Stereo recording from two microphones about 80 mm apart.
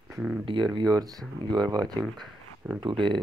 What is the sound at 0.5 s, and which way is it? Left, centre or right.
Speech, right.